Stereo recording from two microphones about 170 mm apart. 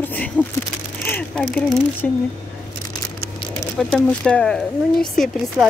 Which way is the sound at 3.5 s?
5° left (ahead or behind).